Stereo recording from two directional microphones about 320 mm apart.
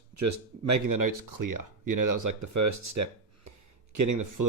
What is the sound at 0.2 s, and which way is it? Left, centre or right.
Speech, right.